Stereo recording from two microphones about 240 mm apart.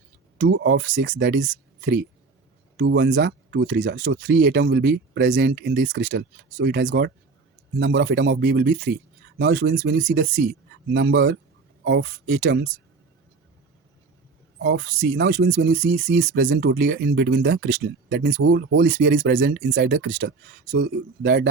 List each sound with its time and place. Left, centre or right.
0.3 s speech: right
14.6 s speech: right
16.4 s speech: right